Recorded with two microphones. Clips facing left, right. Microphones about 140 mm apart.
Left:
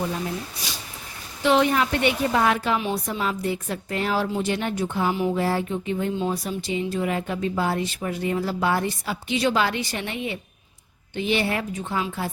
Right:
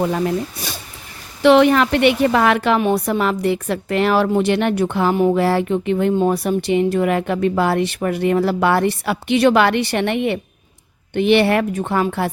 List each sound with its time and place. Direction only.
0.0 s a woman's voice: 70° right (ahead or behind)